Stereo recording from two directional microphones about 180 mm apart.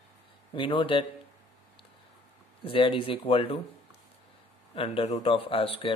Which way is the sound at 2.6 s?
30° left (ahead or behind).